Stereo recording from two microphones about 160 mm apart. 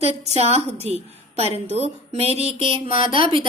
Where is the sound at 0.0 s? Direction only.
40° right (ahead or behind).